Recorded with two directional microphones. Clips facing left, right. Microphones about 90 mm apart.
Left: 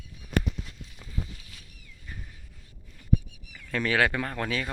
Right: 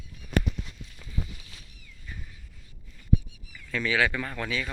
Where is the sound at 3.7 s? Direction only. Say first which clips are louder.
Left 1 dB; 50° left (ahead or behind).